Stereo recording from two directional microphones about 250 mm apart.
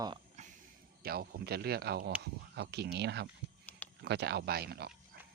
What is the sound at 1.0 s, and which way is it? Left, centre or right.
Speech, right.